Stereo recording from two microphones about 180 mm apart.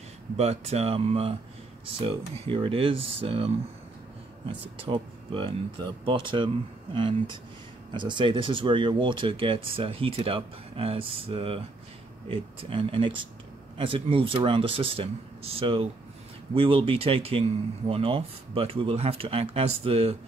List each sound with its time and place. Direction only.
0.4 s speech: 35° right (ahead or behind)
4.5 s speech: 25° right (ahead or behind)